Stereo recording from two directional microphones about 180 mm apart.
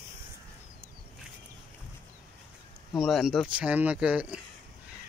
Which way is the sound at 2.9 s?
Centre (ahead or behind).